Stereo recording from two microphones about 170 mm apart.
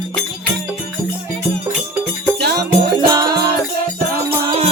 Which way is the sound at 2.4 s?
70° right (ahead or behind).